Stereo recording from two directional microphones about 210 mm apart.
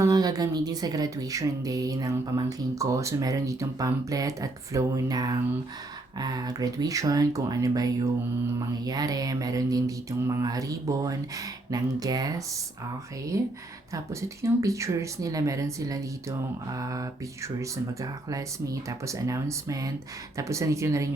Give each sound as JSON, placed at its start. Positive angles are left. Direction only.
{"t": 0.0, "sound": "speech", "side_deg": -15}
{"t": 13.3, "sound": "speech", "side_deg": -15}